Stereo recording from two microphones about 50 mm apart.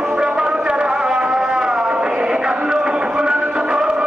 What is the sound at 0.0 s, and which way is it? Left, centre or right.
Music, centre.